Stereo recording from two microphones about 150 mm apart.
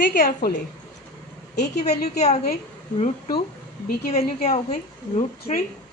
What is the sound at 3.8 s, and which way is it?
A woman's voice, 50° left (ahead or behind).